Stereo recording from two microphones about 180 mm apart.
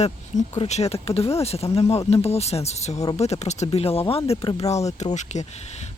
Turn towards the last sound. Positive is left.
turn(degrees=40)  # may be behind; listen again after turning